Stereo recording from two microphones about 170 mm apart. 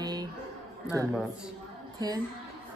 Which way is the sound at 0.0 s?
25° right (ahead or behind).